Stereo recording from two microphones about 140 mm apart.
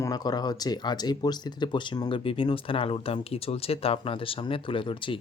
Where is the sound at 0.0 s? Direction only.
30° left (ahead or behind).